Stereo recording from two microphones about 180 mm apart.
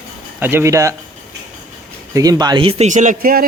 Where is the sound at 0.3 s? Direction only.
10° right (ahead or behind).